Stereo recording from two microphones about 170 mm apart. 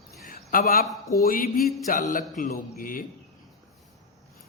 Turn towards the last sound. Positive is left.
turn(degrees=55)  # may be behind; listen again after turning